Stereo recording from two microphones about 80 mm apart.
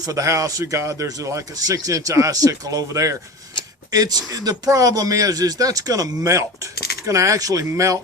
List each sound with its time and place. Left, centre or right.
0.0 s speech: right